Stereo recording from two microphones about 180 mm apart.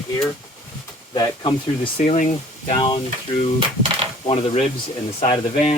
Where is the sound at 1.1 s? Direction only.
25° left (ahead or behind).